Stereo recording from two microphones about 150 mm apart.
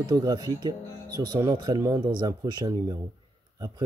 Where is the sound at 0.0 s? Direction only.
25° right (ahead or behind).